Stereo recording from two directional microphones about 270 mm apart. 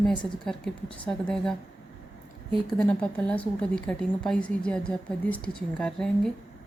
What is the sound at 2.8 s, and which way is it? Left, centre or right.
A woman's voice, centre.